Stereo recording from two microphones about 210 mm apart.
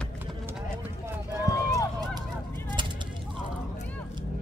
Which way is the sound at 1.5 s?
15° left (ahead or behind).